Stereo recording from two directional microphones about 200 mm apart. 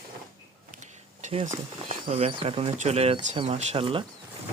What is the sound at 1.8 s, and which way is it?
Speech, 30° right (ahead or behind).